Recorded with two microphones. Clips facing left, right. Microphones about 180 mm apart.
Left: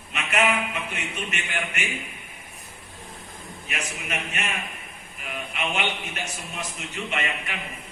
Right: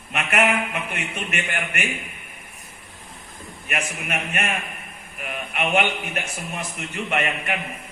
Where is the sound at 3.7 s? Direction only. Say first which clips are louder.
Right 5 dB; 55° right (ahead or behind).